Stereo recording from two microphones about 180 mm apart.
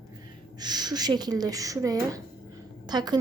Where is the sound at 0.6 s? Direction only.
20° right (ahead or behind).